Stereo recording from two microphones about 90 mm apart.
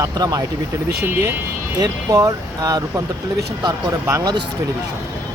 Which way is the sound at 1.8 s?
45° right (ahead or behind).